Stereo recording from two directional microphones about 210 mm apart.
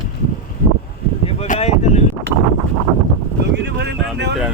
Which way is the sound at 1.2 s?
30° left (ahead or behind).